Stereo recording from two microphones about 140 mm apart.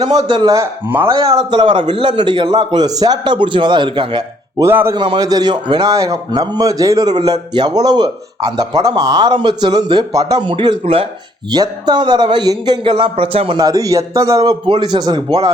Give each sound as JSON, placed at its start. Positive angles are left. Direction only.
{"t": 0.0, "sound": "a man's voice", "side_deg": -30}
{"t": 0.9, "sound": "a man's voice", "side_deg": -15}
{"t": 1.1, "sound": "a man's voice", "side_deg": -25}
{"t": 4.6, "sound": "a man's voice", "side_deg": -20}
{"t": 4.9, "sound": "a man's voice", "side_deg": -30}
{"t": 13.6, "sound": "a man's voice", "side_deg": -25}